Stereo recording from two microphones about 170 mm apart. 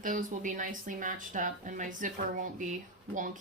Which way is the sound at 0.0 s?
50° right (ahead or behind).